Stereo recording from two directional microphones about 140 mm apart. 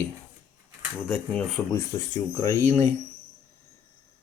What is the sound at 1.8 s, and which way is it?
Speech, 20° left (ahead or behind).